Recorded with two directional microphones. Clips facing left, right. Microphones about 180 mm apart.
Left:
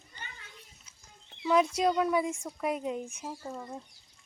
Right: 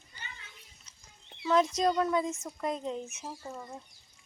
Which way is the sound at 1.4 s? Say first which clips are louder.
Left 1 dB; 10° left (ahead or behind).